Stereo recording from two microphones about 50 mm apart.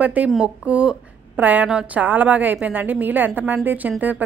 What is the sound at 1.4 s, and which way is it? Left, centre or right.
A woman's voice, right.